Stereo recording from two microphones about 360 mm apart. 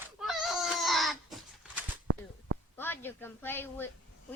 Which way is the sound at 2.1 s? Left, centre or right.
Right.